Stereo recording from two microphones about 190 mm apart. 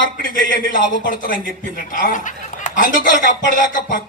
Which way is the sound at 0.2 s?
45° left (ahead or behind).